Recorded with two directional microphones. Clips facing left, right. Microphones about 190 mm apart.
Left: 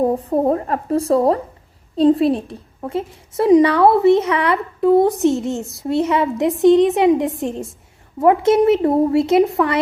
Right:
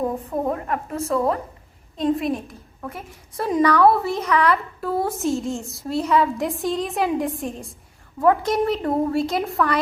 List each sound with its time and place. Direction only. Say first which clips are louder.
0.0 s a woman's voice: left 7 dB; 35° left (ahead or behind)